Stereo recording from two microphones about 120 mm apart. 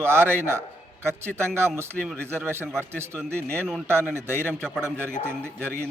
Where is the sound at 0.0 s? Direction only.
20° right (ahead or behind).